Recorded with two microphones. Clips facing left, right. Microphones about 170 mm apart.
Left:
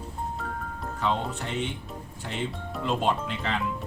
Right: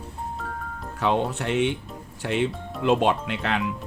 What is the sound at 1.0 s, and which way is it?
Speech, 75° right (ahead or behind).